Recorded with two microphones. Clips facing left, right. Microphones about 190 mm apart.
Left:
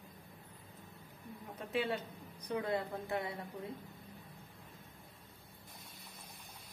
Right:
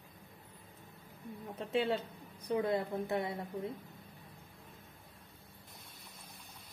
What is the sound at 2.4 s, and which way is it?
Speech, 25° right (ahead or behind).